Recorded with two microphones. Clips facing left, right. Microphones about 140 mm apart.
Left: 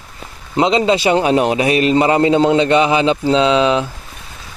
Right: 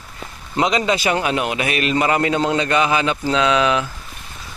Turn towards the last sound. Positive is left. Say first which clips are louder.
# left 4 dB
turn(degrees=25)  # may be behind; listen again after turning